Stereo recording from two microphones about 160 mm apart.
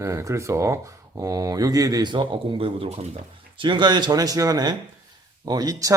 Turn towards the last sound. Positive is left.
turn(degrees=-25)  # may be behind; listen again after turning